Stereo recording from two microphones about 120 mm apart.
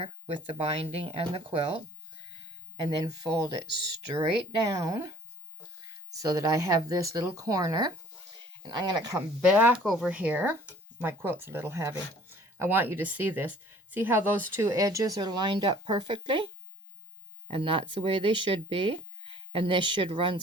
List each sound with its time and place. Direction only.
0.0 s speech: 50° right (ahead or behind)
3.0 s speech: 30° right (ahead or behind)
6.1 s speech: 30° right (ahead or behind)
9.1 s speech: 10° right (ahead or behind)
14.7 s speech: 30° right (ahead or behind); by 16.5 s 45° right (ahead or behind)
17.5 s speech: 45° right (ahead or behind)